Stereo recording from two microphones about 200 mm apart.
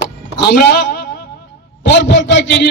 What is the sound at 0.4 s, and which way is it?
A man's voice, 55° left (ahead or behind).